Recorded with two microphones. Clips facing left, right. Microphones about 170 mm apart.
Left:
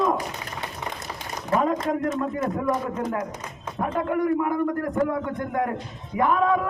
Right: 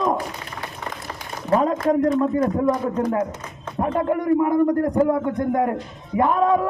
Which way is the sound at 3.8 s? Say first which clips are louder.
Right 3 dB; 25° right (ahead or behind).